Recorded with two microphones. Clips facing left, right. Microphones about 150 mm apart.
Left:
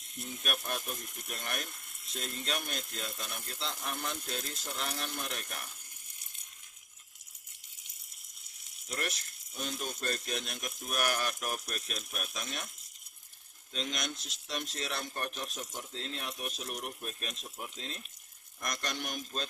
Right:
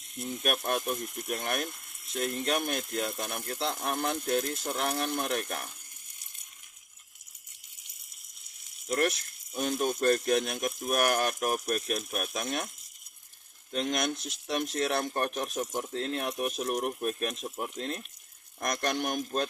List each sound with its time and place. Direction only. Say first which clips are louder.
0.4 s speech: right 8 dB; 55° right (ahead or behind)
8.9 s speech: right 10 dB; 55° right (ahead or behind)
13.7 s speech: right 8 dB; 55° right (ahead or behind)